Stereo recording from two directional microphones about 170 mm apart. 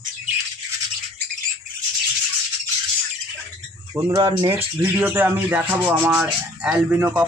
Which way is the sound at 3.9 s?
15° right (ahead or behind).